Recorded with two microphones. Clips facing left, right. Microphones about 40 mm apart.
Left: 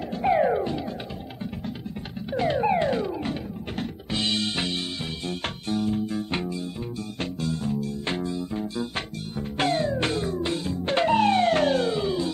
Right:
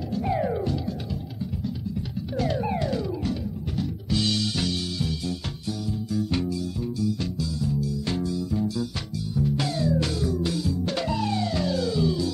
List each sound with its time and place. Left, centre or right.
0.1 s music: left
2.3 s music: left